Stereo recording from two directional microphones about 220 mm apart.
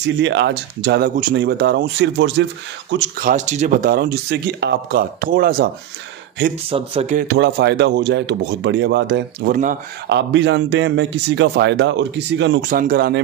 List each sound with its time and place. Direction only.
0.0 s speech: 55° right (ahead or behind)
2.9 s speech: 40° right (ahead or behind)
6.7 s speech: 25° right (ahead or behind)
7.2 s speech: 50° right (ahead or behind)
12.6 s speech: 40° right (ahead or behind)